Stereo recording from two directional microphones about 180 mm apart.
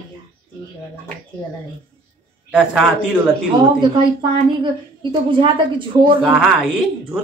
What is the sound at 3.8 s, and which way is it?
Speech, 25° right (ahead or behind).